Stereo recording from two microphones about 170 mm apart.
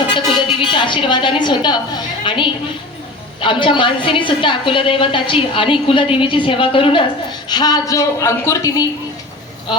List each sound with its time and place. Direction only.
0.1 s a woman's voice: 30° left (ahead or behind)